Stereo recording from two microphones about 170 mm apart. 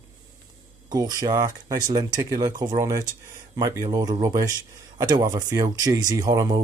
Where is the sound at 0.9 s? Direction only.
20° right (ahead or behind).